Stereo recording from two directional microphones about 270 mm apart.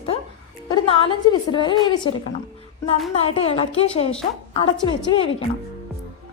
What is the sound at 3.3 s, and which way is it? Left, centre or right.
A woman's voice, left.